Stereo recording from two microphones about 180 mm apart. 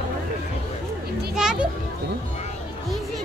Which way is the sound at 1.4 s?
5° right (ahead or behind).